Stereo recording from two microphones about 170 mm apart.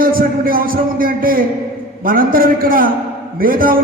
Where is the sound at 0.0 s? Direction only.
60° right (ahead or behind).